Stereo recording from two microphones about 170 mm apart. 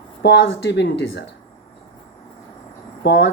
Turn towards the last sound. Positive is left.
turn(degrees=80)